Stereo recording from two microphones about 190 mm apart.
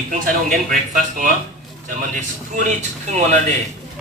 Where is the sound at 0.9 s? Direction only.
45° right (ahead or behind).